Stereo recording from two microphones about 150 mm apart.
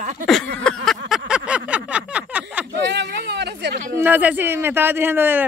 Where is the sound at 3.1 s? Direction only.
90° right.